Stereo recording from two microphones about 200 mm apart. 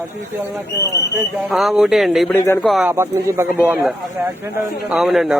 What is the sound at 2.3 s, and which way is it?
Speech, 10° left (ahead or behind).